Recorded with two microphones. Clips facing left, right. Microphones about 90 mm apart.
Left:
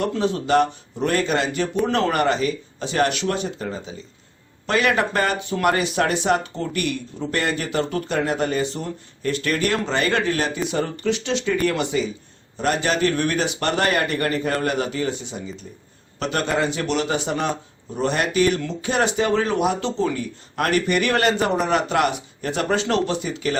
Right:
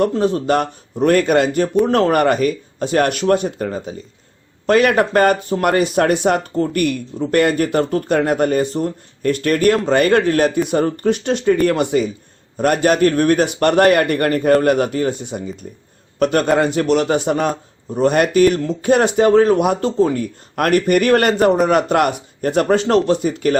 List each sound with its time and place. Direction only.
0.0 s speech: 45° right (ahead or behind)